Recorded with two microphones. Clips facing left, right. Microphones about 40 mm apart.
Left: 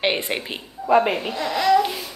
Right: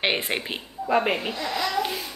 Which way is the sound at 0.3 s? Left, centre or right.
Centre.